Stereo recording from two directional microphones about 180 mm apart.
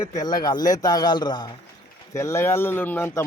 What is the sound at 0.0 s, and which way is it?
A man's voice, 20° left (ahead or behind).